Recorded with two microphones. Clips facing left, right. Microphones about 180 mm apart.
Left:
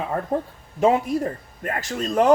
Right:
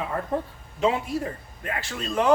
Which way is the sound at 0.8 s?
45° left (ahead or behind).